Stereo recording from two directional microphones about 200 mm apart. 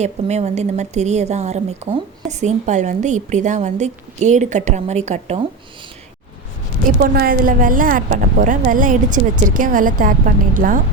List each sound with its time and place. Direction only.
0.0 s a woman's voice: 35° right (ahead or behind)
7.0 s a woman's voice: 50° right (ahead or behind)